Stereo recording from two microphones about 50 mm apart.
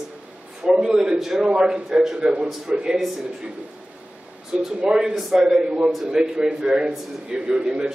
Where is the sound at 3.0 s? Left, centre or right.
Centre.